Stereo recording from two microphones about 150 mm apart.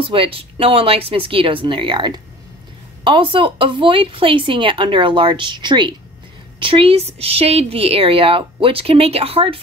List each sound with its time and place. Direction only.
0.0 s speech: 35° right (ahead or behind)